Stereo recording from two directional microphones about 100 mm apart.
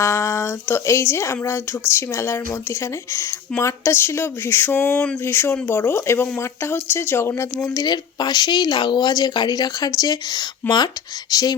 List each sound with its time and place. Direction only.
0.0 s speech: 30° left (ahead or behind)
3.6 s speech: 30° left (ahead or behind)